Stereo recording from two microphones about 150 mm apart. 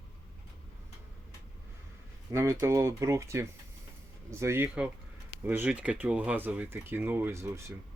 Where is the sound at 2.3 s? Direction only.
20° right (ahead or behind).